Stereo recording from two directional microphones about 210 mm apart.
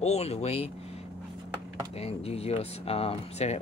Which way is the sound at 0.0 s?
30° left (ahead or behind).